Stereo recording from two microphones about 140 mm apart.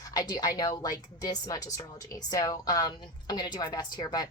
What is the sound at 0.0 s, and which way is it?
A woman's voice, 25° left (ahead or behind).